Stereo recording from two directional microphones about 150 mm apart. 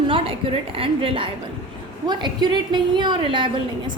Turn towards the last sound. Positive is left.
turn(degrees=-35)  # may be behind; listen again after turning